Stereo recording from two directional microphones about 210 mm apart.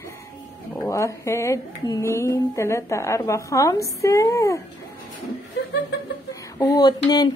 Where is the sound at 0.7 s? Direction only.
10° left (ahead or behind).